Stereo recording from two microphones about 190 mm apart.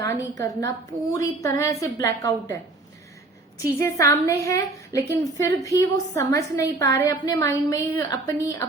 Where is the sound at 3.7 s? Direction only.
15° left (ahead or behind).